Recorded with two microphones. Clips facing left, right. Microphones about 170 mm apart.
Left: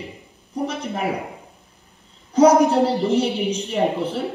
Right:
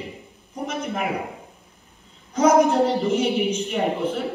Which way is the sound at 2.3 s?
35° left (ahead or behind).